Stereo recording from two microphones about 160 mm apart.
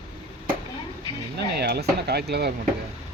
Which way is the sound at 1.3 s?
90° right.